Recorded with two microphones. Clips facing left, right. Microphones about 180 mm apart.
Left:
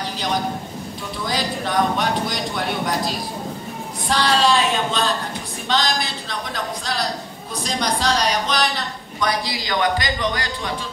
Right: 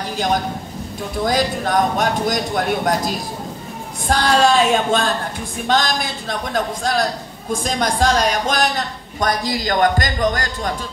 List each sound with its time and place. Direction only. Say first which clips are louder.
1.2 s speech: right 6 dB; 45° right (ahead or behind)
4.1 s speech: right 3 dB; 50° right (ahead or behind)